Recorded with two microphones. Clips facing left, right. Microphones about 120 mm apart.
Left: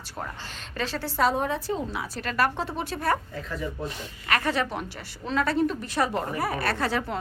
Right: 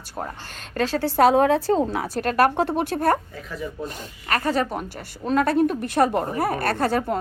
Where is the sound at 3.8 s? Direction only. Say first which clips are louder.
Right 1 dB; 35° right (ahead or behind).